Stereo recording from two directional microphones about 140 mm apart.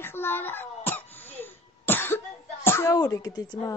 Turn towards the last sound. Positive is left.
turn(degrees=25)  # may be behind; listen again after turning